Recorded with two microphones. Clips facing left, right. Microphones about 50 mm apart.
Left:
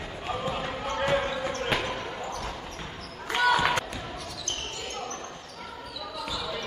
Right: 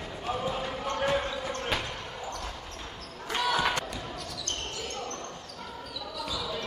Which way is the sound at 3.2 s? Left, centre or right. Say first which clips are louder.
Left 5 dB; left.